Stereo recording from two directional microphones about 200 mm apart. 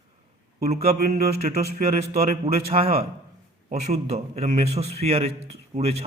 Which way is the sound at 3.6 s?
35° right (ahead or behind).